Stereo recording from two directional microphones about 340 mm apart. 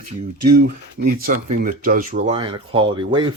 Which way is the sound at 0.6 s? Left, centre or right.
Right.